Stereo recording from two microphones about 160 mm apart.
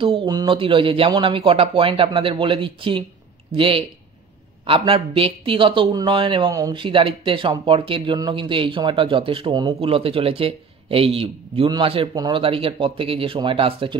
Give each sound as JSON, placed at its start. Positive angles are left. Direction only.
{"t": 0.0, "sound": "speech", "side_deg": -30}